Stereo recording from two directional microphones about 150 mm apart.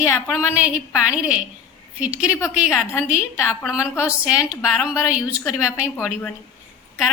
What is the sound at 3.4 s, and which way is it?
Speech, 15° left (ahead or behind).